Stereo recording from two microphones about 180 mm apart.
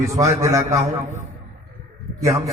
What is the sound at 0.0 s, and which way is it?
Speech, 15° right (ahead or behind).